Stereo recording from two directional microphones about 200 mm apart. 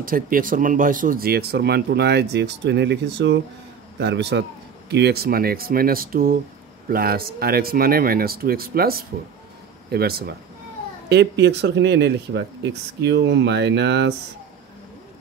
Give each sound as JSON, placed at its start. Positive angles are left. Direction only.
{"t": 0.0, "sound": "speech", "side_deg": -45}